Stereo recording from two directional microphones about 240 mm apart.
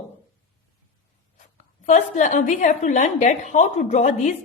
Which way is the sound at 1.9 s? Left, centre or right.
Left.